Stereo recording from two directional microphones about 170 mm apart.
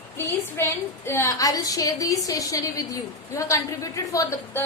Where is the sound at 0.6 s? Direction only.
15° left (ahead or behind).